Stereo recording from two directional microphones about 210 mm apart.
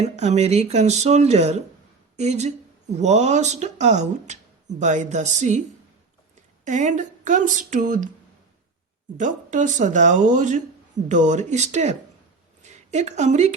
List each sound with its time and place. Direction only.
0.2 s speech: 30° right (ahead or behind)
6.7 s speech: 35° right (ahead or behind)
9.1 s speech: 35° right (ahead or behind)